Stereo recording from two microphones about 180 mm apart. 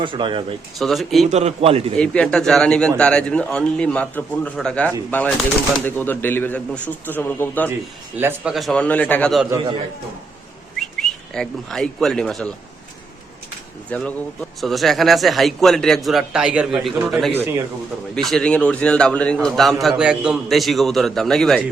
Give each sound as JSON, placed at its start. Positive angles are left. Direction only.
{"t": 0.0, "sound": "speech", "side_deg": -25}
{"t": 0.8, "sound": "a man's voice", "side_deg": 0}
{"t": 1.3, "sound": "a man's voice", "side_deg": -40}
{"t": 2.0, "sound": "a man's voice", "side_deg": 5}
{"t": 8.2, "sound": "a man's voice", "side_deg": -5}
{"t": 10.8, "sound": "speech", "side_deg": 0}
{"t": 13.9, "sound": "a man's voice", "side_deg": 10}
{"t": 17.3, "sound": "speech", "side_deg": -15}
{"t": 18.1, "sound": "a man's voice", "side_deg": 5}